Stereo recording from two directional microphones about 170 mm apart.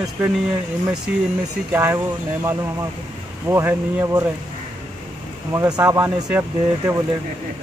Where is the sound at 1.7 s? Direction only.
15° right (ahead or behind).